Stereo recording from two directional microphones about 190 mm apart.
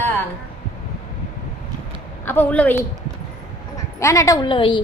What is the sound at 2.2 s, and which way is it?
Speech, 10° left (ahead or behind).